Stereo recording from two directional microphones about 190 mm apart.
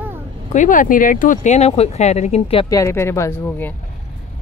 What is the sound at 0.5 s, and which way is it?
Speech, 45° left (ahead or behind).